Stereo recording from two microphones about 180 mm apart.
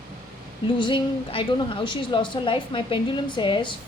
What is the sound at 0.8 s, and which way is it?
A woman's voice, 25° left (ahead or behind).